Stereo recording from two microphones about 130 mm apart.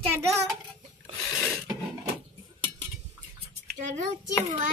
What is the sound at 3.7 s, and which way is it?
Speech, 70° right (ahead or behind).